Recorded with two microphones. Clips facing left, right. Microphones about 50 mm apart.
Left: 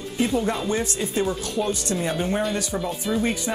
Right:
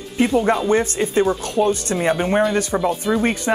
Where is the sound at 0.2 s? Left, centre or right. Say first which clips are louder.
Right 6 dB; right.